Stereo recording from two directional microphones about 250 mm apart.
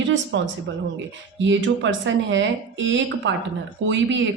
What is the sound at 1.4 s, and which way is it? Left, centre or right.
A woman's voice, right.